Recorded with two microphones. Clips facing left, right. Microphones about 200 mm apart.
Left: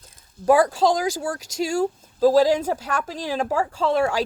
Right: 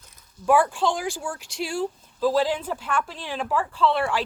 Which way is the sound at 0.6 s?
35° left (ahead or behind).